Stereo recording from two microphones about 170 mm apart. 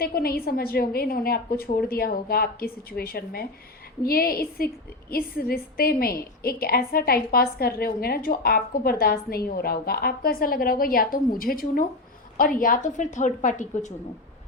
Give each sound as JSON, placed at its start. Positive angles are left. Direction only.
{"t": 0.0, "sound": "a woman's voice", "side_deg": 65}